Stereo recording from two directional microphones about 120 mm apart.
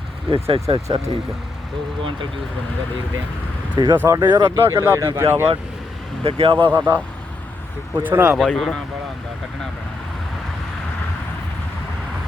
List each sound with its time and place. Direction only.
0.3 s speech: 50° right (ahead or behind)
3.8 s speech: 35° right (ahead or behind)
4.5 s speech: 25° right (ahead or behind)
6.2 s speech: 50° right (ahead or behind)
6.7 s speech: 15° right (ahead or behind)
8.4 s speech: centre (ahead or behind)